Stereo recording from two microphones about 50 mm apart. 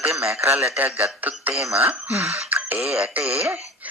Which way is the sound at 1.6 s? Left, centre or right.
Right.